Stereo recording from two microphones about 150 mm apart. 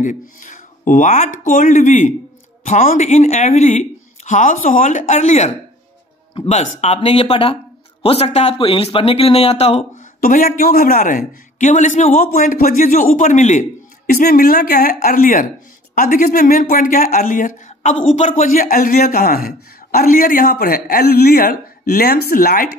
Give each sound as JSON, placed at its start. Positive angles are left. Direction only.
{"t": 0.0, "sound": "a man's voice", "side_deg": 60}
{"t": 10.2, "sound": "a man's voice", "side_deg": 65}
{"t": 14.0, "sound": "speech", "side_deg": 75}